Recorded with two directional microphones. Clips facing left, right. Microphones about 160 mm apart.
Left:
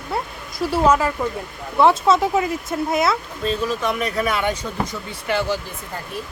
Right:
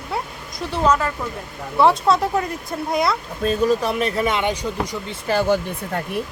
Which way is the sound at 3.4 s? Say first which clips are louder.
Right 7 dB; 50° right (ahead or behind).